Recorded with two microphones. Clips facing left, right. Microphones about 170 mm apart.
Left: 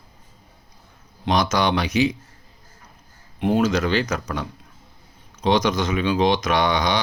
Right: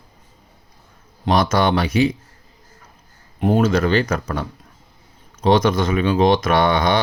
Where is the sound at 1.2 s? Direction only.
50° right (ahead or behind).